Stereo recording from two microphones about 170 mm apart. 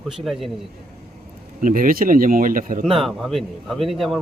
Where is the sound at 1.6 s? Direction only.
55° right (ahead or behind).